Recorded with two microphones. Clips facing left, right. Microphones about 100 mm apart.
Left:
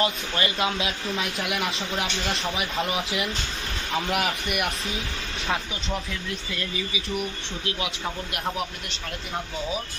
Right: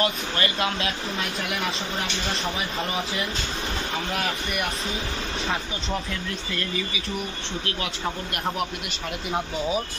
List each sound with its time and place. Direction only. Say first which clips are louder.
0.0 s speech: even; 20° left (ahead or behind); by 3.0 s centre (ahead or behind)
4.1 s speech: left 2 dB; 10° left (ahead or behind)